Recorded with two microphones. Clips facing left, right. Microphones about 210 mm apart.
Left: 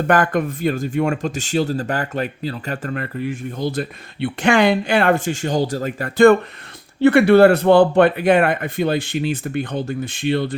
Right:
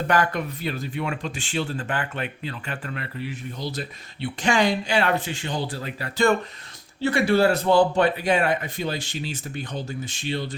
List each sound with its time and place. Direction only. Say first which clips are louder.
0.1 s speech: left 6 dB; 50° left (ahead or behind)